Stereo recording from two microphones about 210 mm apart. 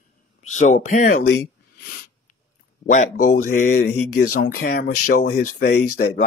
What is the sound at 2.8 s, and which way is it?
Speech, 40° left (ahead or behind).